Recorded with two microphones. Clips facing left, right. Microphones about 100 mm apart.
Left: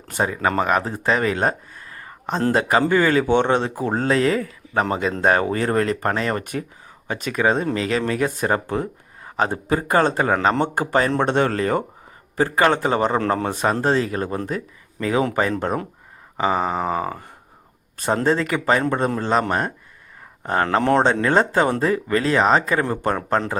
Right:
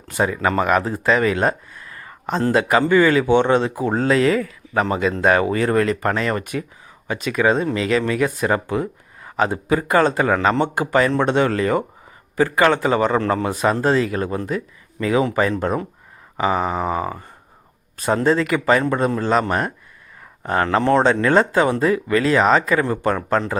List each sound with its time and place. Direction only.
0.1 s speech: 35° left (ahead or behind)